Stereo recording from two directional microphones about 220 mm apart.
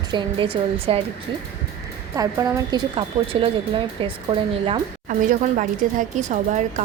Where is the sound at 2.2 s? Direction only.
15° right (ahead or behind).